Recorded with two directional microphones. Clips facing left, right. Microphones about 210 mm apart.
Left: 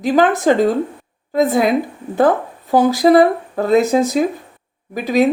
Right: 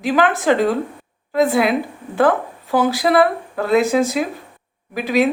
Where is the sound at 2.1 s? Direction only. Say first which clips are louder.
Left 2 dB; 45° left (ahead or behind).